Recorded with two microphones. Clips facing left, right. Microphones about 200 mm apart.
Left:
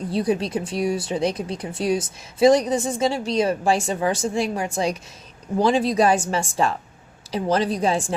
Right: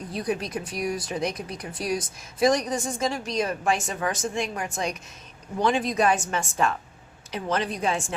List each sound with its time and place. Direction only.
0.1 s a woman's voice: 30° left (ahead or behind)